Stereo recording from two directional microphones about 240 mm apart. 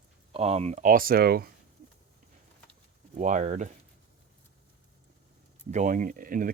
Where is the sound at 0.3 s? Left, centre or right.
Right.